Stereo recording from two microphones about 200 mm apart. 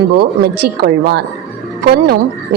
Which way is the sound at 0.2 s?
50° right (ahead or behind).